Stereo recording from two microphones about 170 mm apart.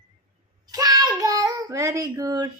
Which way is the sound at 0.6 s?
20° right (ahead or behind).